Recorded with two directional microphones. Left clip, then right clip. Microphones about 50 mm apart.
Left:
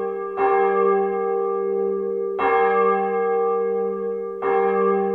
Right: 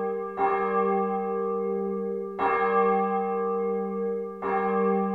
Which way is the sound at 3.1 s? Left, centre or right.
Centre.